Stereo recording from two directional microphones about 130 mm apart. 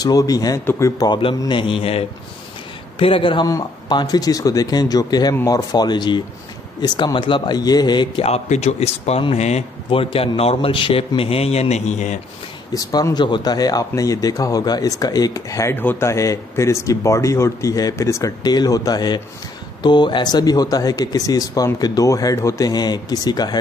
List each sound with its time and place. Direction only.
0.0 s speech: 30° left (ahead or behind)
1.5 s a man's voice: 40° left (ahead or behind)
3.4 s speech: 30° left (ahead or behind)
8.2 s a man's voice: 55° left (ahead or behind)
12.7 s speech: 30° left (ahead or behind)